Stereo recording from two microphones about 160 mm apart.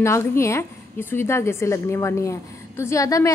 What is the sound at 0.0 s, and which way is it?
A woman's voice, 15° left (ahead or behind).